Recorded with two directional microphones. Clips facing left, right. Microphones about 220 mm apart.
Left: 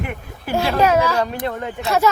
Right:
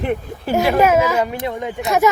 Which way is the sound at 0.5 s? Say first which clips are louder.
Right 2 dB; 20° right (ahead or behind).